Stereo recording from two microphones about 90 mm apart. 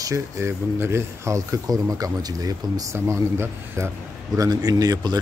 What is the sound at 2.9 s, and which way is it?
Speech, 30° right (ahead or behind).